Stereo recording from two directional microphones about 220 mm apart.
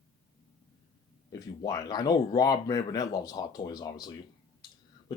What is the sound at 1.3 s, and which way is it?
Speech, 15° left (ahead or behind).